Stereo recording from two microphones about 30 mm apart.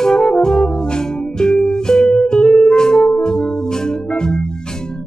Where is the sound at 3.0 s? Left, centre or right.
Left.